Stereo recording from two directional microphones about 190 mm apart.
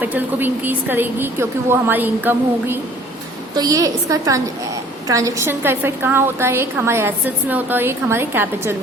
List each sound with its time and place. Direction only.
0.0 s a woman's voice: 10° right (ahead or behind)